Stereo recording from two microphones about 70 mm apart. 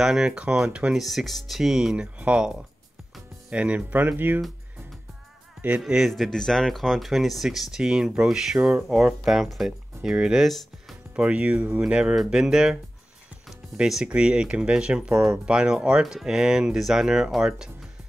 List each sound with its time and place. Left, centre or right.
0.0 s speech: centre
1.0 s speech: centre; by 4.4 s right
5.8 s speech: centre
8.5 s speech: centre
8.8 s speech: centre
11.1 s speech: centre
13.7 s speech: centre